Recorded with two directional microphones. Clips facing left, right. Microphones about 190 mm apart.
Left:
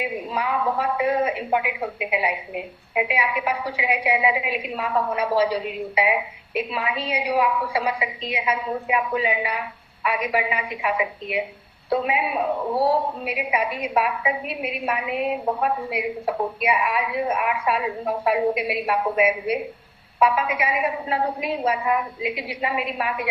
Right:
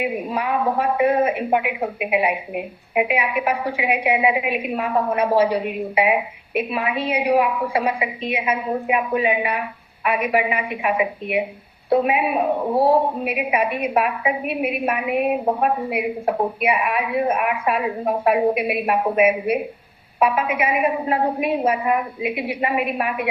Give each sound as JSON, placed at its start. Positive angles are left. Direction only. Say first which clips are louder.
{"t": 0.0, "sound": "a woman's voice", "louder": "right 3 dB", "side_deg": -55}
{"t": 12.6, "sound": "speech", "louder": "right 3 dB", "side_deg": -25}
{"t": 12.9, "sound": "a woman's voice", "louder": "right 5 dB", "side_deg": -55}